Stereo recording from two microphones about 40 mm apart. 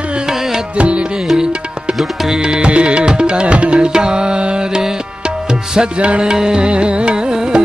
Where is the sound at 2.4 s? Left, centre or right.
Right.